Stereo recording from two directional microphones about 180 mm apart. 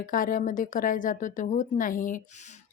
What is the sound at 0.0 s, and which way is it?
Speech, 50° left (ahead or behind).